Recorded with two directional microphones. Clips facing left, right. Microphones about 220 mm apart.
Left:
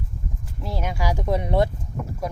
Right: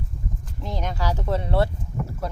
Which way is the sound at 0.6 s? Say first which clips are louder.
Left 1 dB; 5° left (ahead or behind).